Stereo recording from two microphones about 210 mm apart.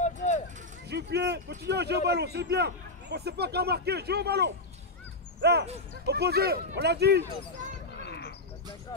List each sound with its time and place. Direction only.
0.0 s vehicle: 35° left (ahead or behind)
0.8 s a sound: 50° right (ahead or behind)
1.7 s a man's voice: 50° right (ahead or behind)
7.9 s frog: 50° left (ahead or behind)